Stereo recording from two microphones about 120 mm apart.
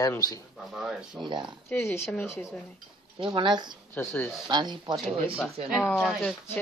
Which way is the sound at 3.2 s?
40° right (ahead or behind).